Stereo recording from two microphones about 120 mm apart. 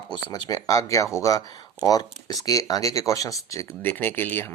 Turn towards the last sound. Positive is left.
turn(degrees=20)  # may be behind; listen again after turning